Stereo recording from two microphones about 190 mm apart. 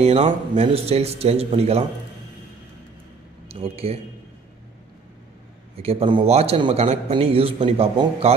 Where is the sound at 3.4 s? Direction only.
30° right (ahead or behind).